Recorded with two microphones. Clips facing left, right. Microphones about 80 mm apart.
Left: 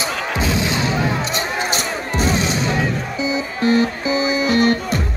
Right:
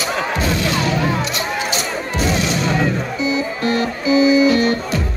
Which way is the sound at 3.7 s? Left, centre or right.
Left.